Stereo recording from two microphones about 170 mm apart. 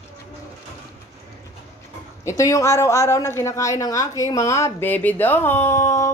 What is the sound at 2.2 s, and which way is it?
Speech, 20° left (ahead or behind).